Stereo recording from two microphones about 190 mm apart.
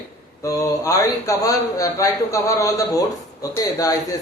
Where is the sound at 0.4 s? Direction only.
15° left (ahead or behind).